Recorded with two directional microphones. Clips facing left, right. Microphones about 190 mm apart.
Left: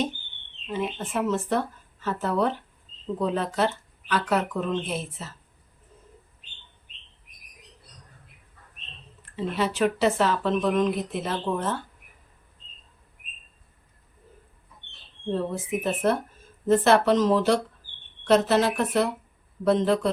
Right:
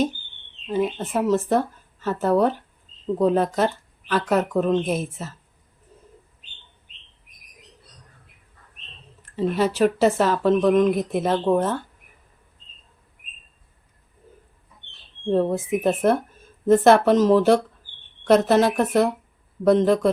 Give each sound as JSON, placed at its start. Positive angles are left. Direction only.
{"t": 0.7, "sound": "speech", "side_deg": -40}
{"t": 9.2, "sound": "speech", "side_deg": -45}
{"t": 15.8, "sound": "speech", "side_deg": -50}